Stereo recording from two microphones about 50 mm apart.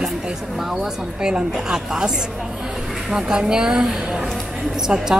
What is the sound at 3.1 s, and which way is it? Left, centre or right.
Speech, centre.